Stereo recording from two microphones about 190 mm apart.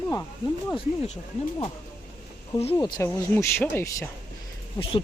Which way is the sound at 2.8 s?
20° left (ahead or behind).